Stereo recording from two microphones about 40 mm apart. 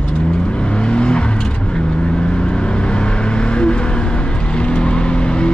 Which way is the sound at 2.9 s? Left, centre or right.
Left.